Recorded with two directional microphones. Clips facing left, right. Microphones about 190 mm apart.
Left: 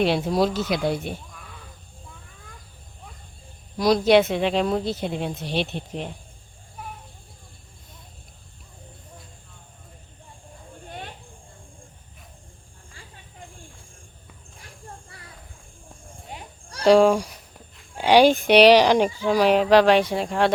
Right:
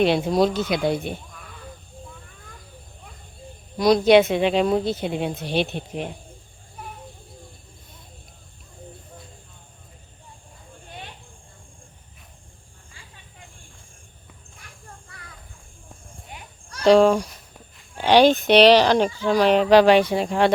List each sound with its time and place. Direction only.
0.0 s speech: centre (ahead or behind)
3.8 s speech: centre (ahead or behind)
16.3 s children playing: 30° left (ahead or behind)
16.8 s speech: 10° left (ahead or behind)